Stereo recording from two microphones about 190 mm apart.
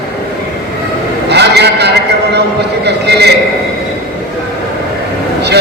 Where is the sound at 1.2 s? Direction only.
60° right (ahead or behind).